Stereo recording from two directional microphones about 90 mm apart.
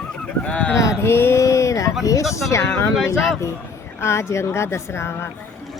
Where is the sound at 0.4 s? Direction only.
10° left (ahead or behind).